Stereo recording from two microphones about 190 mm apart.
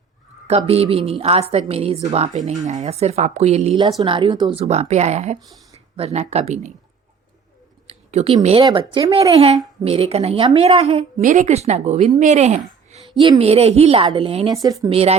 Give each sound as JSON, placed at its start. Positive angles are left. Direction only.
{"t": 0.4, "sound": "speech", "side_deg": -30}
{"t": 7.9, "sound": "a woman's voice", "side_deg": -35}
{"t": 14.5, "sound": "a woman's voice", "side_deg": -20}